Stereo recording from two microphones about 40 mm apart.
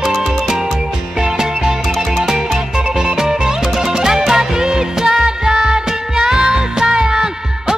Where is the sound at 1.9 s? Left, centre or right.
Centre.